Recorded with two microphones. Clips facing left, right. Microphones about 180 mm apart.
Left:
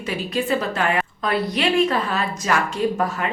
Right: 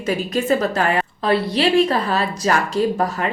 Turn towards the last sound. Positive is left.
turn(degrees=-35)  # may be behind; listen again after turning